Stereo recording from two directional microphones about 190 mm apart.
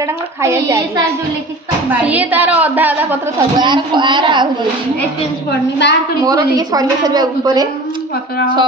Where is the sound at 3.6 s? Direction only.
25° right (ahead or behind).